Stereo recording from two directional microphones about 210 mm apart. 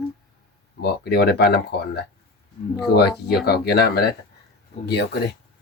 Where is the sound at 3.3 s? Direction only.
50° left (ahead or behind).